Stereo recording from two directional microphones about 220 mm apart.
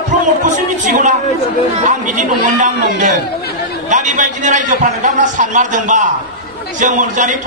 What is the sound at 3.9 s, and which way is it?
A man's voice, 35° right (ahead or behind).